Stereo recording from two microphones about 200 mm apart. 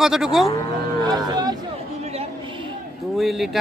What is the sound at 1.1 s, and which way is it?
Speech, 20° right (ahead or behind).